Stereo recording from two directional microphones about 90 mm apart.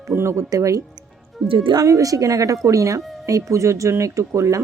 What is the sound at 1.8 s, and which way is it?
A woman's voice, 40° right (ahead or behind).